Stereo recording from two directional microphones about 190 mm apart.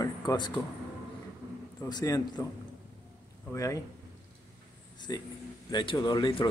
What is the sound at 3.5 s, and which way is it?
Speech, 15° left (ahead or behind).